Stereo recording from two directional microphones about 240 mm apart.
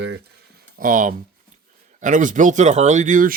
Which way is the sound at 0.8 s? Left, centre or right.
Right.